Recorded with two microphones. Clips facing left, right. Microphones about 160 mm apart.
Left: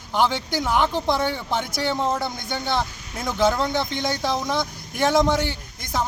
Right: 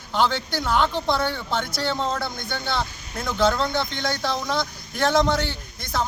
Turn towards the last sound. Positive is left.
turn(degrees=15)  # may be behind; listen again after turning